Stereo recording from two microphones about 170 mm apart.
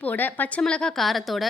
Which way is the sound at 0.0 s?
10° left (ahead or behind).